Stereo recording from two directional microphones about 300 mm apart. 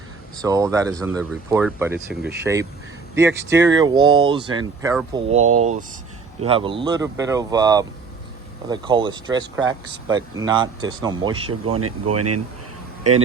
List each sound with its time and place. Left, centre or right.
0.4 s speech: centre
6.4 s speech: centre
11.8 s speech: right